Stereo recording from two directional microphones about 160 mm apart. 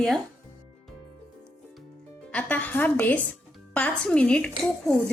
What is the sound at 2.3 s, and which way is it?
A woman's voice, 10° left (ahead or behind).